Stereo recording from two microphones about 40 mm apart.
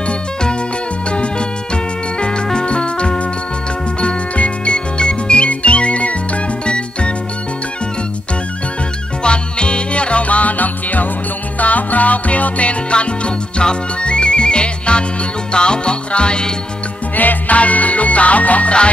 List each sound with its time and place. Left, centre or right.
1.1 s music: left
9.2 s music: left
17.1 s music: left